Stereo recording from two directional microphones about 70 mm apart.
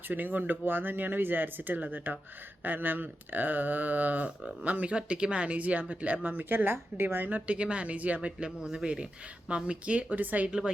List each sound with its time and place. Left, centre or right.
0.1 s speech: right